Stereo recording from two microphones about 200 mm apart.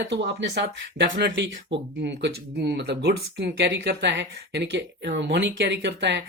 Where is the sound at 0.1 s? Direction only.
60° right (ahead or behind).